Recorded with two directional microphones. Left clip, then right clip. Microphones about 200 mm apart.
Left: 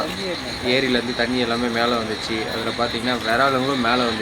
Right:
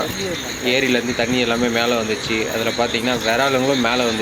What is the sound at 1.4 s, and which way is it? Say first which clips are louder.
Speech: right 4 dB; 10° right (ahead or behind).